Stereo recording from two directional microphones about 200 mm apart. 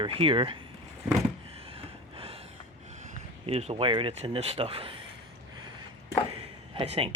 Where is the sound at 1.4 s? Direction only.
30° right (ahead or behind).